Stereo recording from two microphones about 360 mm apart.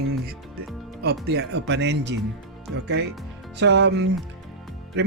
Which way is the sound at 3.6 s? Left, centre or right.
Right.